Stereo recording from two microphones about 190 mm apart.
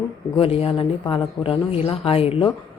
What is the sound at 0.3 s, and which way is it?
Speech, 30° left (ahead or behind).